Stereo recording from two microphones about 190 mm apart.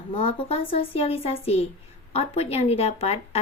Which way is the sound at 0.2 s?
30° left (ahead or behind).